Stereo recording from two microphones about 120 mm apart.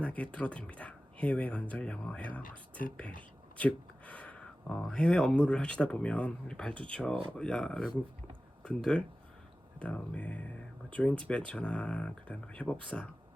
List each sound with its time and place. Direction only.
0.0 s speech: 10° left (ahead or behind)